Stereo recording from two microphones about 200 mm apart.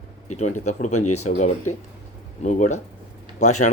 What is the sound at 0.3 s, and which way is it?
Speech, 35° left (ahead or behind).